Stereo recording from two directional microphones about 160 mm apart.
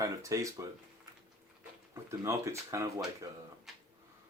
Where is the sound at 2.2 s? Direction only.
20° right (ahead or behind).